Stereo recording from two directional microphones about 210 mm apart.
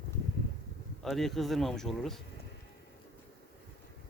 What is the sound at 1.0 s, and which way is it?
Speech, centre (ahead or behind).